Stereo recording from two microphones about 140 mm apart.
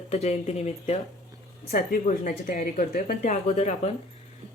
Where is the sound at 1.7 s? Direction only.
80° left.